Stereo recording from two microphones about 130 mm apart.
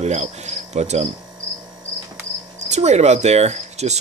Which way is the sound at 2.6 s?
60° right (ahead or behind).